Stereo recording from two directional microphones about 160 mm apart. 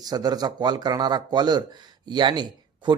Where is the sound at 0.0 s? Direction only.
25° right (ahead or behind).